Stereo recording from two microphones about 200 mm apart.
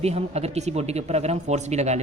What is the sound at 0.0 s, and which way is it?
Speech, 30° right (ahead or behind).